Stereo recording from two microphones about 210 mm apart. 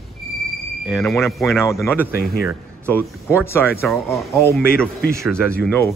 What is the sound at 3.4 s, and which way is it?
Speech, 10° left (ahead or behind).